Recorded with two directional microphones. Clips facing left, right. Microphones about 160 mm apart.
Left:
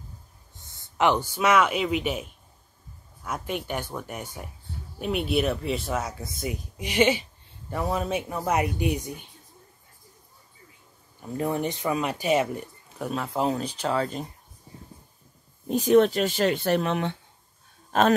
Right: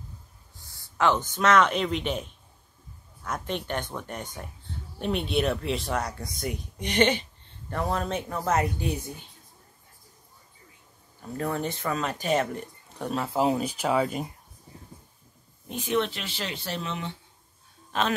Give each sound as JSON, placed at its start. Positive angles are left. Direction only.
{"t": 0.6, "sound": "speech", "side_deg": 20}
{"t": 11.3, "sound": "speech", "side_deg": 15}
{"t": 15.7, "sound": "speech", "side_deg": 40}
{"t": 17.9, "sound": "a man's voice", "side_deg": 45}